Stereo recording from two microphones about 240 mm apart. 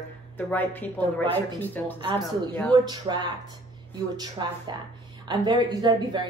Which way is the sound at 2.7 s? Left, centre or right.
Centre.